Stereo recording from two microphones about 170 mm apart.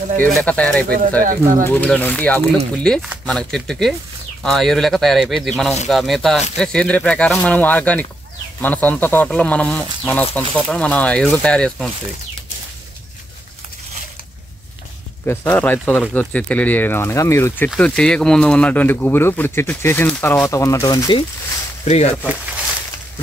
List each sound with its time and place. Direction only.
0.2 s speech: 5° left (ahead or behind)
0.8 s speech: 60° right (ahead or behind)
1.6 s speech: 10° left (ahead or behind)
15.2 s speech: 10° left (ahead or behind)
21.8 s speech: 40° left (ahead or behind)
22.2 s speech: 10° right (ahead or behind)